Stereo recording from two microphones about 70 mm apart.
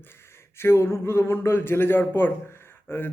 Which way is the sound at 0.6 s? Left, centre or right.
Left.